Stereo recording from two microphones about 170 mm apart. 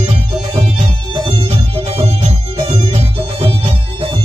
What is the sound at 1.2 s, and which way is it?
Music, 30° right (ahead or behind).